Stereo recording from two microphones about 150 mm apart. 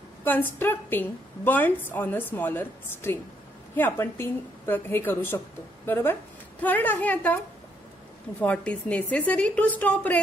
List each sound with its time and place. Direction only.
0.2 s a woman's voice: 15° left (ahead or behind)
6.6 s a woman's voice: 10° left (ahead or behind)
8.4 s a woman's voice: 10° left (ahead or behind)